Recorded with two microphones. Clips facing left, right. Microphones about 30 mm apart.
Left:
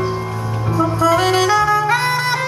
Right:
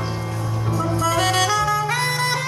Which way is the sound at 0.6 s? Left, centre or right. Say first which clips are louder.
Left 7 dB; centre.